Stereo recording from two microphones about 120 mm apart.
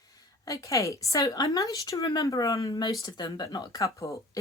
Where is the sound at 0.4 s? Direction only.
30° left (ahead or behind).